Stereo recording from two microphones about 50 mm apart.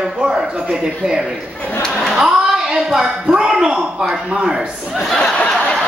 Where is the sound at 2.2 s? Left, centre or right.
Centre.